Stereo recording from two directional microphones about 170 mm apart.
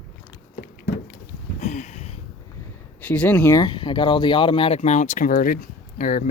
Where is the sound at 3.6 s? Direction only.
25° left (ahead or behind); by 6.2 s 55° left (ahead or behind).